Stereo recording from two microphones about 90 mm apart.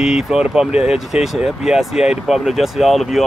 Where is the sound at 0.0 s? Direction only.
5° right (ahead or behind).